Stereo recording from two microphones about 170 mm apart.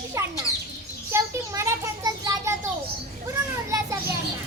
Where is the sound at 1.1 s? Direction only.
15° right (ahead or behind).